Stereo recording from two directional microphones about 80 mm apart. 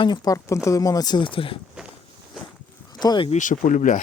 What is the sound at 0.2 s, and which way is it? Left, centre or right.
Speech, left.